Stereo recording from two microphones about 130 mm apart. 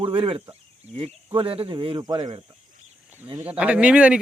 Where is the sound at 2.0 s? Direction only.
30° right (ahead or behind).